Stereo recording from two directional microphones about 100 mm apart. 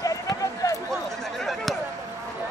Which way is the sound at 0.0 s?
35° left (ahead or behind).